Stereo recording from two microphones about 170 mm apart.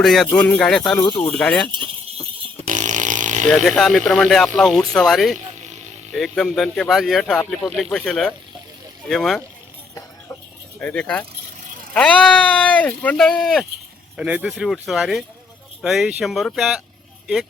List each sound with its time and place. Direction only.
0.0 s speech: centre (ahead or behind)
1.0 s speech: 25° left (ahead or behind)
1.3 s speech: 5° left (ahead or behind)
2.6 s a sound: 45° right (ahead or behind)
3.4 s speech: 5° left (ahead or behind)
5.5 s a sound: 45° right (ahead or behind)
6.1 s speech: centre (ahead or behind)
10.8 s speech: 5° left (ahead or behind)
12.5 s speech: 10° left (ahead or behind)